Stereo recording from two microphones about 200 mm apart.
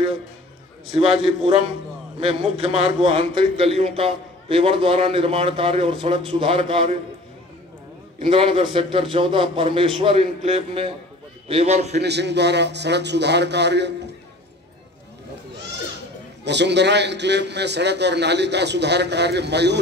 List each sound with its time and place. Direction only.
0.9 s a man's voice: 25° right (ahead or behind)
8.2 s a man's voice: 25° right (ahead or behind)
12.0 s a man's voice: 55° right (ahead or behind)
16.4 s a man's voice: 60° right (ahead or behind)